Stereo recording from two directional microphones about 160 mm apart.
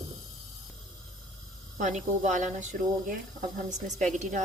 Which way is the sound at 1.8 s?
50° right (ahead or behind).